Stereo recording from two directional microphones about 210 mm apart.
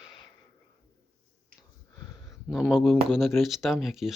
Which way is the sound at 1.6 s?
Centre (ahead or behind).